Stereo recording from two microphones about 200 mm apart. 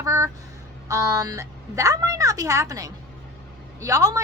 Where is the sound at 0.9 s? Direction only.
15° right (ahead or behind).